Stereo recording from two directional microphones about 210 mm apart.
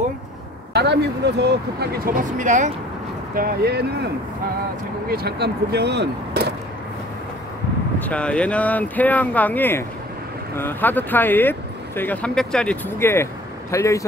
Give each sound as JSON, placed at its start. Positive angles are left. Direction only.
{"t": 0.7, "sound": "speech", "side_deg": -55}
{"t": 3.3, "sound": "speech", "side_deg": -50}
{"t": 5.1, "sound": "speech", "side_deg": -50}
{"t": 8.0, "sound": "speech", "side_deg": 5}